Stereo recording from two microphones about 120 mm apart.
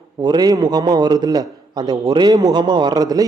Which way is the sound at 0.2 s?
35° right (ahead or behind).